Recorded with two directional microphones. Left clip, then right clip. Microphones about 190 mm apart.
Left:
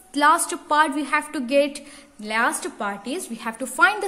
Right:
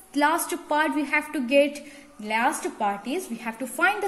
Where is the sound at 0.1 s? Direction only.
30° left (ahead or behind).